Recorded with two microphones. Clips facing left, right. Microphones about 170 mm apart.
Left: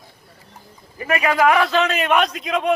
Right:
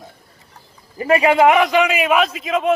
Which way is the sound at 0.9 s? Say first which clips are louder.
Right 5 dB; 30° right (ahead or behind).